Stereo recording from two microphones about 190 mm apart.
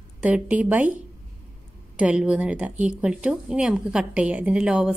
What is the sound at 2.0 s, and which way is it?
A woman's voice, 5° right (ahead or behind).